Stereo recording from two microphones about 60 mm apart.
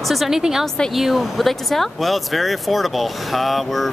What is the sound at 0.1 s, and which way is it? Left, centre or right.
A woman's voice, centre.